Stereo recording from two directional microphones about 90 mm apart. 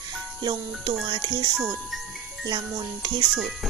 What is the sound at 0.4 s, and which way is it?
Speech, 50° right (ahead or behind).